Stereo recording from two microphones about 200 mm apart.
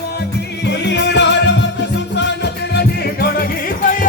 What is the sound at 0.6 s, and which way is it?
Music, 60° left (ahead or behind).